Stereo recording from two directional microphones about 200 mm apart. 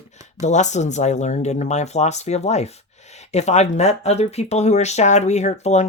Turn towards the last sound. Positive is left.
turn(degrees=35)  # may be behind; listen again after turning